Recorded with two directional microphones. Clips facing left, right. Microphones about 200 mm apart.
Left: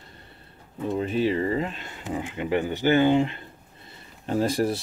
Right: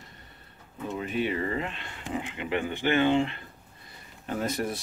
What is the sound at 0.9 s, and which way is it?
Speech, 30° left (ahead or behind).